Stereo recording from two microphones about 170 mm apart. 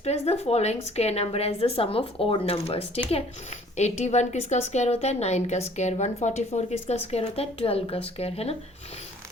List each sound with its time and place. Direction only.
0.0 s a woman's voice: 40° left (ahead or behind)